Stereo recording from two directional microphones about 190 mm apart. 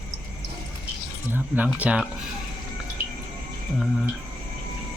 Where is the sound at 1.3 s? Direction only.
10° right (ahead or behind).